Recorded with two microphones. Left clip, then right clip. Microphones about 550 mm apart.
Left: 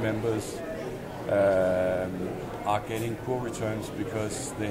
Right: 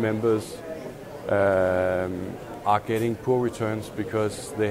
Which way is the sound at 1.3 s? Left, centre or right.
Right.